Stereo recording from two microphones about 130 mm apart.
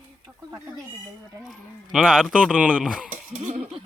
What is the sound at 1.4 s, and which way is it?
Speech, 5° right (ahead or behind).